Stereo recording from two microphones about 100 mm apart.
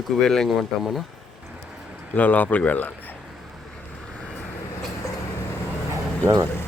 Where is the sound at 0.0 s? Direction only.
5° left (ahead or behind).